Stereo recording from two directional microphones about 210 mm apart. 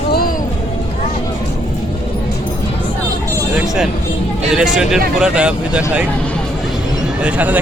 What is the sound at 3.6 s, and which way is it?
Speech, centre (ahead or behind).